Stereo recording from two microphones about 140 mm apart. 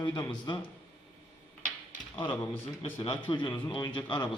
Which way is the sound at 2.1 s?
40° left (ahead or behind).